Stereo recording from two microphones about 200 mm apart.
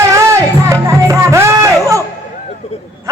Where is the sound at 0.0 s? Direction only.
15° right (ahead or behind).